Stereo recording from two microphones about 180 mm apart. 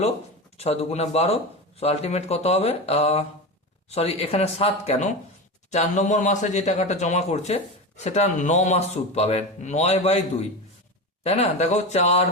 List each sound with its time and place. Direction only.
0.5 s speech: 35° left (ahead or behind)
11.2 s speech: 35° left (ahead or behind)